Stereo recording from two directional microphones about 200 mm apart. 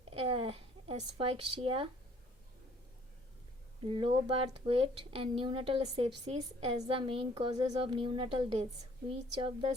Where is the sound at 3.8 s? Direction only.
25° right (ahead or behind).